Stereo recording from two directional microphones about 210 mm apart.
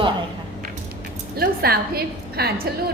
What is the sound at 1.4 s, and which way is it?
A woman's voice, 45° right (ahead or behind).